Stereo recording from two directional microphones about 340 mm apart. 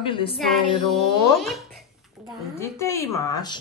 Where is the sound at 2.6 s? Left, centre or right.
Centre.